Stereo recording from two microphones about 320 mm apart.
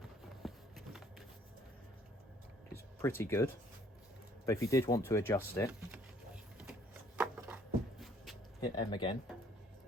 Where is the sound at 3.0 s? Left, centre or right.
Centre.